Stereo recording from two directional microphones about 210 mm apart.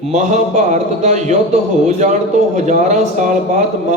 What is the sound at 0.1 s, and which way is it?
A man's voice, 35° right (ahead or behind).